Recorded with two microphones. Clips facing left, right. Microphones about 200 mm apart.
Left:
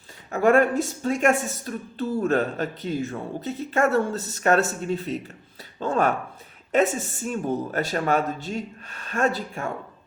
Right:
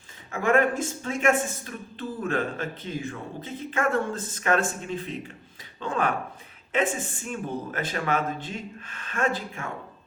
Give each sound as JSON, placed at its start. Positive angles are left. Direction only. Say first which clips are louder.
{"t": 0.3, "sound": "a woman's voice", "louder": "left 4 dB", "side_deg": 40}